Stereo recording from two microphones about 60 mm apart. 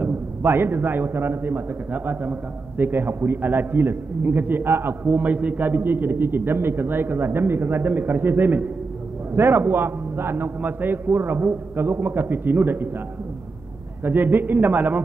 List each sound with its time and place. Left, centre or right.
0.0 s a man's voice: right
14.0 s a man's voice: right